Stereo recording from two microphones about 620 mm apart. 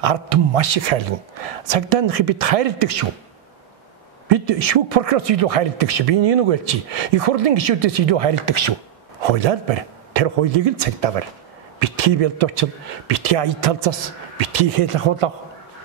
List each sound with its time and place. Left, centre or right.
0.0 s speech: right
4.3 s speech: right
9.2 s a man's voice: right